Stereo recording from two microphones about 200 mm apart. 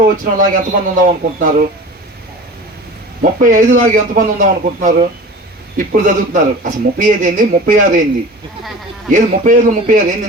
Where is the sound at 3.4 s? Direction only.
40° right (ahead or behind).